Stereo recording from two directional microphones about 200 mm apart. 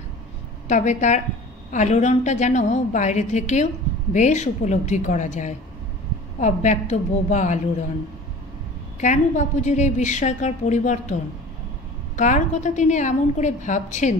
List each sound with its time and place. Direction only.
0.7 s a woman's voice: 35° left (ahead or behind)
9.0 s a woman's voice: 35° left (ahead or behind)
12.2 s a woman's voice: 40° left (ahead or behind)